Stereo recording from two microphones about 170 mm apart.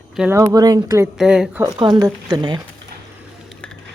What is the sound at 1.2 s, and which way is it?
Speech, 5° right (ahead or behind).